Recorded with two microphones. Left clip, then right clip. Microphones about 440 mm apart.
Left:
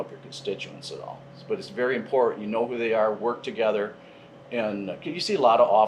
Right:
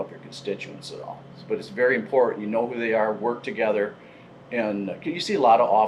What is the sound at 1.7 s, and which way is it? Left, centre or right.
Speech, centre.